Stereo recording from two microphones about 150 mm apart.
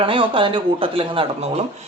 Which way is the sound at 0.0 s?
35° right (ahead or behind).